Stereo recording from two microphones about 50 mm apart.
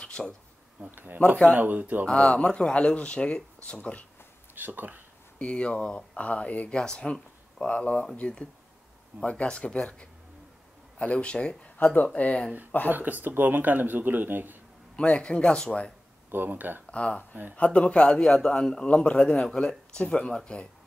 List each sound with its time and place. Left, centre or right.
0.0 s a sound: centre
0.7 s speech: right
2.0 s speech: centre
4.6 s speech: right
5.4 s speech: left
6.7 s speech: centre
11.8 s speech: left
12.9 s speech: right
15.0 s speech: left
16.3 s speech: right
16.9 s speech: left
19.4 s speech: centre